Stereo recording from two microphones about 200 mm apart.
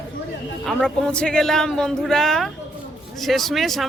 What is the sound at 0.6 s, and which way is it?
Speech, 5° left (ahead or behind).